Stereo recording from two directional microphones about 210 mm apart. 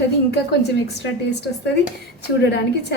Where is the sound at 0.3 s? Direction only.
50° left (ahead or behind).